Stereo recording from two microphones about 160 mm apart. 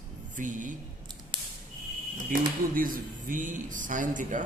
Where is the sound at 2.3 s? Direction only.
60° right (ahead or behind).